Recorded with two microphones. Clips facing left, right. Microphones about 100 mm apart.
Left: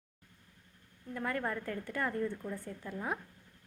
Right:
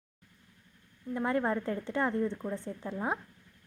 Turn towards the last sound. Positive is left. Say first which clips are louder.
# right 4 dB
turn(degrees=-25)  # may be behind; listen again after turning